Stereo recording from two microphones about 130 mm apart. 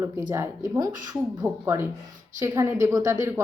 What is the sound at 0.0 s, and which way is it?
A woman's voice, 20° right (ahead or behind).